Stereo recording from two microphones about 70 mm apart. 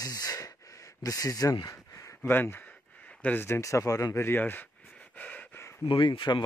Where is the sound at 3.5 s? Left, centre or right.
Left.